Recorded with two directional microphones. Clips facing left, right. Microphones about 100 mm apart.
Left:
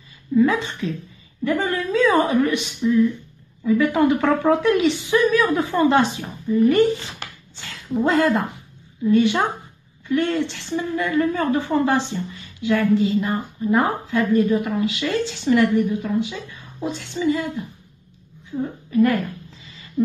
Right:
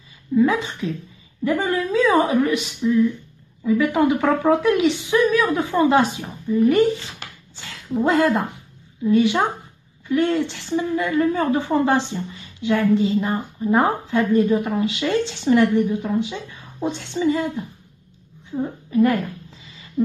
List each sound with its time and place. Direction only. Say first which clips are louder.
0.4 s a woman's voice: even; 10° right (ahead or behind)
7.9 s a woman's voice: even; 10° right (ahead or behind); by 17.5 s 35° right (ahead or behind)
18.5 s a woman's voice: right 1 dB; 25° right (ahead or behind)